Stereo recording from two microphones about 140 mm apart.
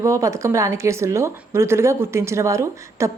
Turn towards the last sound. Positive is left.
turn(degrees=-20)  # may be behind; listen again after turning